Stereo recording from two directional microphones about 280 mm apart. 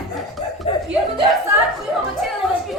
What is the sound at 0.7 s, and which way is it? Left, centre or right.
Speech, left.